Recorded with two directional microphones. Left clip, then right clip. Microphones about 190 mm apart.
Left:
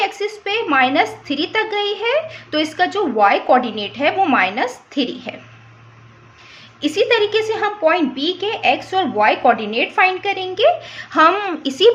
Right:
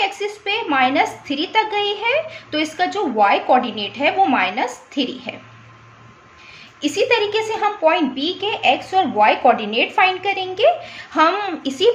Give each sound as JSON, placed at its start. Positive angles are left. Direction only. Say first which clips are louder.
{"t": 0.0, "sound": "a woman's voice", "louder": "left 1 dB", "side_deg": 30}
{"t": 6.8, "sound": "a woman's voice", "louder": "left 2 dB", "side_deg": 30}